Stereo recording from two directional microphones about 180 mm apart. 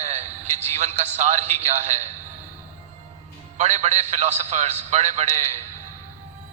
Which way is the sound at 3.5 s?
40° right (ahead or behind).